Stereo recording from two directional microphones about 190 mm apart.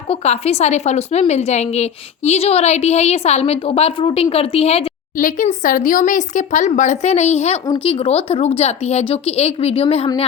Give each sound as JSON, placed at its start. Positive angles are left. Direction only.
{"t": 0.1, "sound": "a woman's voice", "side_deg": 35}